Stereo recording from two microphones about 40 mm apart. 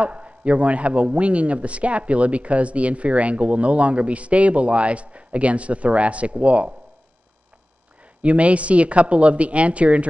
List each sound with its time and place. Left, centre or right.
0.0 s a man's voice: right
8.2 s a man's voice: right